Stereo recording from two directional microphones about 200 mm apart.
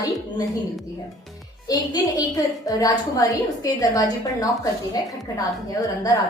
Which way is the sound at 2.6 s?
15° left (ahead or behind).